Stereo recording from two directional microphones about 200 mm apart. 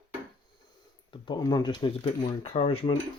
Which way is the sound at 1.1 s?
20° left (ahead or behind).